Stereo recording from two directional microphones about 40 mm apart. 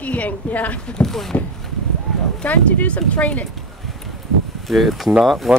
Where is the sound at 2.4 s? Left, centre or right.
Left.